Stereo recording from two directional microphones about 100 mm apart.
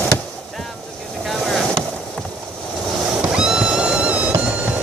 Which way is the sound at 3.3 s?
10° right (ahead or behind).